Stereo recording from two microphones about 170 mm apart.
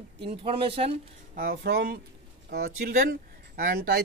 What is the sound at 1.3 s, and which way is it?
Speech, 65° right (ahead or behind).